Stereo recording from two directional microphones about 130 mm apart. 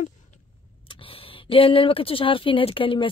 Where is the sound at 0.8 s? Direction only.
40° left (ahead or behind).